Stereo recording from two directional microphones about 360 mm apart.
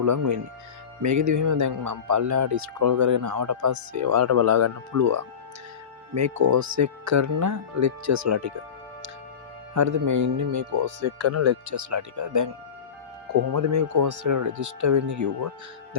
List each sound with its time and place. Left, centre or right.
0.0 s speech: right
9.7 s speech: right
10.8 s speech: right
13.5 s speech: right